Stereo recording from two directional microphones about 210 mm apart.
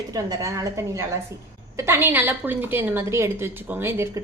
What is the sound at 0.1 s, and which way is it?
A woman's voice, 15° right (ahead or behind).